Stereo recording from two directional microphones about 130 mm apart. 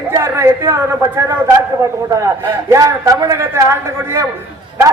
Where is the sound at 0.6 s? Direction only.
25° right (ahead or behind).